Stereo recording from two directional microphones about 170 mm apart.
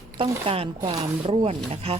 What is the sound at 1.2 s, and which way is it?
Speech, 35° right (ahead or behind).